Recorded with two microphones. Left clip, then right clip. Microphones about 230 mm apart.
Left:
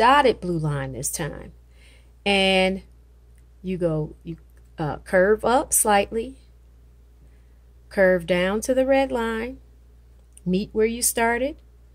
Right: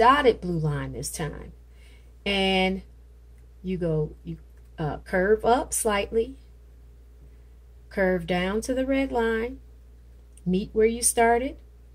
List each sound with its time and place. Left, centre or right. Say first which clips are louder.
0.0 s a woman's voice: left 2 dB; left
7.9 s speech: left 6 dB; left
10.5 s speech: even; left